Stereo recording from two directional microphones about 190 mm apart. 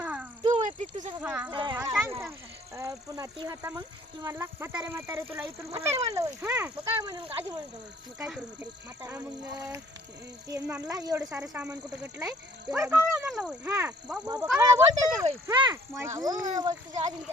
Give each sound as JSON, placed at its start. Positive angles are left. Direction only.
{"t": 0.0, "sound": "a sound", "side_deg": -5}
{"t": 0.4, "sound": "a sound", "side_deg": -35}
{"t": 1.2, "sound": "speech", "side_deg": -5}
{"t": 1.5, "sound": "a sound", "side_deg": -20}
{"t": 3.3, "sound": "speech", "side_deg": -15}
{"t": 6.9, "sound": "speech", "side_deg": -25}
{"t": 9.0, "sound": "speech", "side_deg": -15}
{"t": 11.4, "sound": "speech", "side_deg": -5}
{"t": 13.7, "sound": "speech", "side_deg": -15}